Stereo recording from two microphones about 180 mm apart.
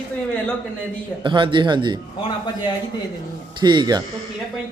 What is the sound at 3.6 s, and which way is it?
Speech, 25° right (ahead or behind).